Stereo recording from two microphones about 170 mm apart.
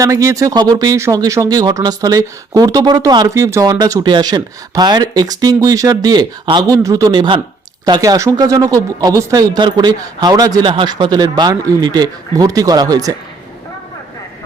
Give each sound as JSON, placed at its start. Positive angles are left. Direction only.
{"t": 0.0, "sound": "speech", "side_deg": -20}